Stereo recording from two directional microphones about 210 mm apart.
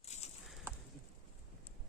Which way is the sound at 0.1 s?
30° left (ahead or behind).